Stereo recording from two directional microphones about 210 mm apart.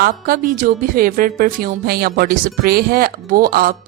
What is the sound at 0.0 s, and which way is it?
A woman's voice, 45° right (ahead or behind).